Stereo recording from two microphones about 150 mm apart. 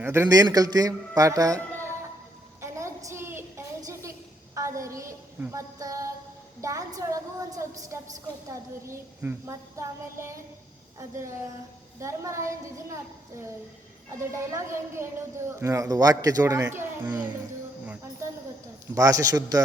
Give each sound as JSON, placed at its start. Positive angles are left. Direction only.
{"t": 0.0, "sound": "a woman's voice", "side_deg": -15}
{"t": 2.6, "sound": "a sound", "side_deg": -20}
{"t": 8.4, "sound": "a woman's voice", "side_deg": -20}
{"t": 11.9, "sound": "a woman's voice", "side_deg": -20}
{"t": 14.2, "sound": "a woman's voice", "side_deg": -20}
{"t": 18.9, "sound": "a woman's voice", "side_deg": -25}